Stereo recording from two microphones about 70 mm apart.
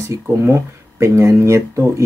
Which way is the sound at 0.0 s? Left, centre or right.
Right.